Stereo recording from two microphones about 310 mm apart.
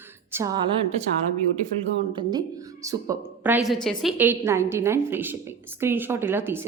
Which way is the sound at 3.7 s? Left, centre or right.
Centre.